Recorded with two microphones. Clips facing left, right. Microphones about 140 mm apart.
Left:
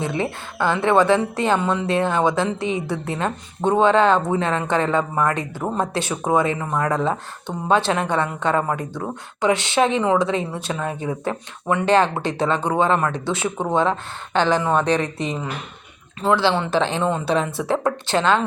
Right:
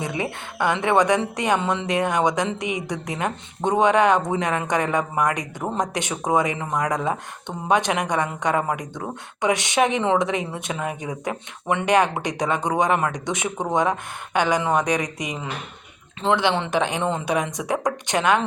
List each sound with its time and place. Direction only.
0.0 s speech: 15° right (ahead or behind)